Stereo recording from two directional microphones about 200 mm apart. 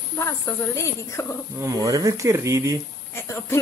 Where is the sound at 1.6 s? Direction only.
15° right (ahead or behind).